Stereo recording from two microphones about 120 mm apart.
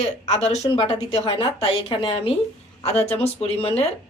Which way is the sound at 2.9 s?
60° left (ahead or behind).